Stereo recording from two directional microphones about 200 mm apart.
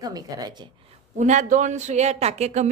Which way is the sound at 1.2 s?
35° right (ahead or behind).